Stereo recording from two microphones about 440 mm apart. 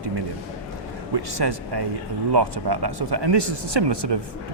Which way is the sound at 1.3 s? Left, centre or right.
Right.